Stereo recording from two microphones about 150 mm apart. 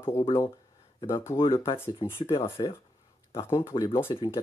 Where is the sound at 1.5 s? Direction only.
15° left (ahead or behind).